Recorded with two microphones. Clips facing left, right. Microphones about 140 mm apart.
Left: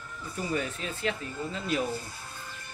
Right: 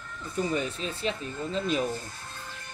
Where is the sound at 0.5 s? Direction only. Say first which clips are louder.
Right 2 dB; 20° right (ahead or behind).